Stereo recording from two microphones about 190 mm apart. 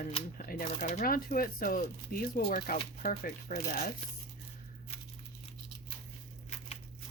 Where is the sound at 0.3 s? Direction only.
50° left (ahead or behind).